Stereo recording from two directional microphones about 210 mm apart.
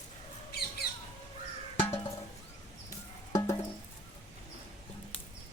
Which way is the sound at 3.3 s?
15° left (ahead or behind).